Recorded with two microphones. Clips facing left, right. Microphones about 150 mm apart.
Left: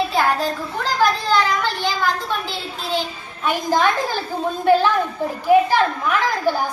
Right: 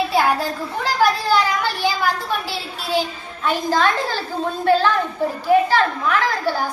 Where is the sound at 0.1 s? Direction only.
10° right (ahead or behind).